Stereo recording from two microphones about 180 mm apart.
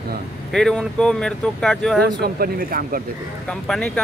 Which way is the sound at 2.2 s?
55° right (ahead or behind).